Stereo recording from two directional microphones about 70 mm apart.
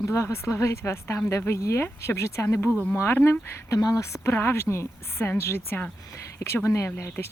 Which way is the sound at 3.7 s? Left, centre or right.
Left.